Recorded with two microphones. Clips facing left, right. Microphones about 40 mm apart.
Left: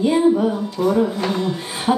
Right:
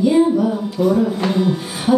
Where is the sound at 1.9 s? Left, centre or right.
Left.